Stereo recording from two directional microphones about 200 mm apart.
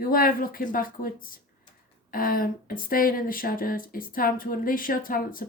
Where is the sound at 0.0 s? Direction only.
45° left (ahead or behind).